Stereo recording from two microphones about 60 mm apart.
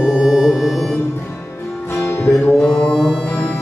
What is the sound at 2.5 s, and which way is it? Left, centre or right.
Music, centre.